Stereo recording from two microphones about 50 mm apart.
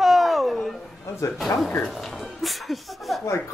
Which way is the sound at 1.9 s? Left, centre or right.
Centre.